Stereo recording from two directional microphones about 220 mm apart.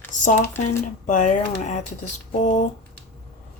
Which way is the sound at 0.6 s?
35° left (ahead or behind).